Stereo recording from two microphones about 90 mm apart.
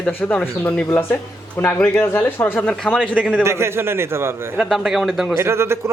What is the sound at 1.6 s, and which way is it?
Speech, 20° left (ahead or behind).